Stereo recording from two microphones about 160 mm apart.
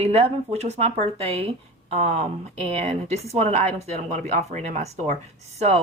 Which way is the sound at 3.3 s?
40° right (ahead or behind).